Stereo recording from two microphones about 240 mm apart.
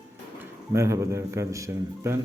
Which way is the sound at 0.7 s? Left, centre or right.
Centre.